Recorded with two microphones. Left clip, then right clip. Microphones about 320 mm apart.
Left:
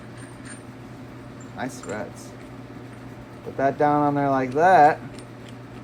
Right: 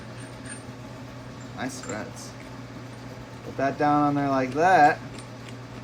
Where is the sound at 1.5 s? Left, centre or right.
Centre.